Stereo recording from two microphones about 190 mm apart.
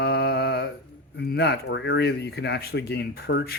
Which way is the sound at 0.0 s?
60° left (ahead or behind).